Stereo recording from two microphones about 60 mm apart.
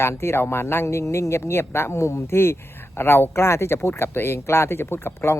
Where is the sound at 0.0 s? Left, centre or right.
Left.